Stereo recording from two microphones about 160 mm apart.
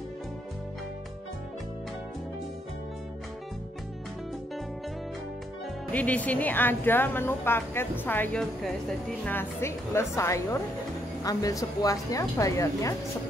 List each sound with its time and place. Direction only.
5.9 s a woman's voice: 10° left (ahead or behind)